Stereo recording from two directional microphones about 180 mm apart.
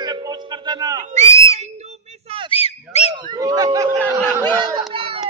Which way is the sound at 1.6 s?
35° right (ahead or behind).